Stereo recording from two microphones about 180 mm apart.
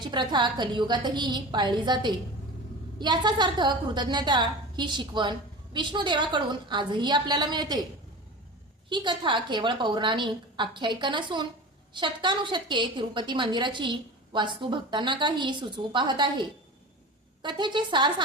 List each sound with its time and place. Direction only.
0.0 s a woman's voice: 25° right (ahead or behind)
8.9 s a woman's voice: 25° right (ahead or behind)